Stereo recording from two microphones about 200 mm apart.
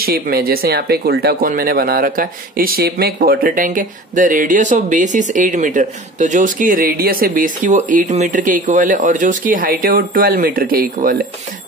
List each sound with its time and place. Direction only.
0.0 s speech: 50° right (ahead or behind)